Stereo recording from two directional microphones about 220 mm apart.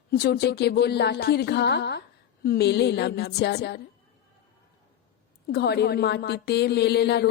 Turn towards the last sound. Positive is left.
turn(degrees=50)  # may be behind; listen again after turning